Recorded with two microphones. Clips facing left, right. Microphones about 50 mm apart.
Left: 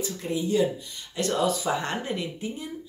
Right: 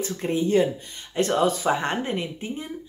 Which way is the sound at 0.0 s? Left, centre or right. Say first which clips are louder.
Right 4 dB; right.